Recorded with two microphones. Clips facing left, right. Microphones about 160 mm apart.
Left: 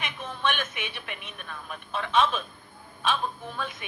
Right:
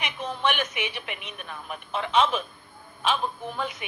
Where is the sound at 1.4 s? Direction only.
10° right (ahead or behind).